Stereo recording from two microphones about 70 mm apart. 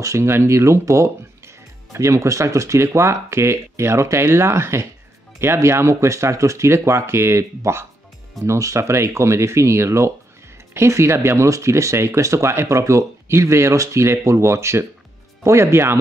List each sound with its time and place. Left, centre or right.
0.0 s speech: right